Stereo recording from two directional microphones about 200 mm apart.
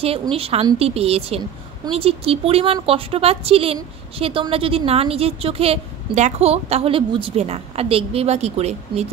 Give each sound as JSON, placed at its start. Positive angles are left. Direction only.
{"t": 0.0, "sound": "a woman's voice", "side_deg": -30}